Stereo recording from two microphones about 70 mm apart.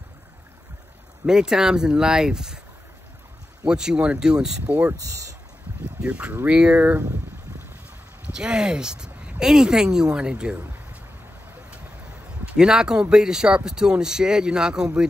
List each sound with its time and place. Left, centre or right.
1.2 s speech: centre
3.6 s speech: centre
5.9 s speech: centre
8.4 s speech: centre
12.5 s speech: centre